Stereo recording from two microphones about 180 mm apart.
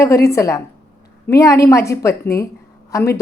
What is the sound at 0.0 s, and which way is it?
A woman's voice, 15° left (ahead or behind).